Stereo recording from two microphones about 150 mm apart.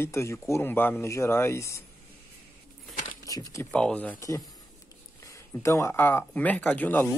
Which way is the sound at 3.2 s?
20° left (ahead or behind).